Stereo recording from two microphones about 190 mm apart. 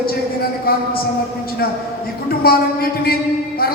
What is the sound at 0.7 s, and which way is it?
Speech, 50° left (ahead or behind).